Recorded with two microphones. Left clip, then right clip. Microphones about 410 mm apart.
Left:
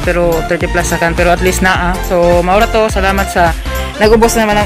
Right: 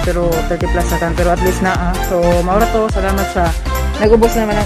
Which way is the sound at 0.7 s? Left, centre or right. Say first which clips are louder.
Left 5 dB; right.